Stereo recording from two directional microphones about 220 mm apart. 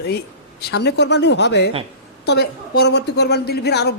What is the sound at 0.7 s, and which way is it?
Speech, 50° left (ahead or behind).